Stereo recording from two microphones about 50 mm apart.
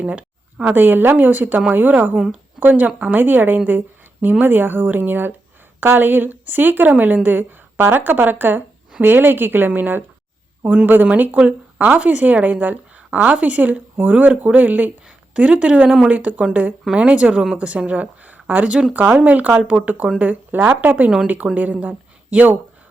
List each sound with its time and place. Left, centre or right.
0.1 s a woman's voice: right